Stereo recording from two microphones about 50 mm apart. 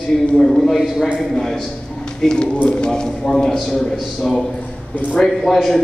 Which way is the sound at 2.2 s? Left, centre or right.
Left.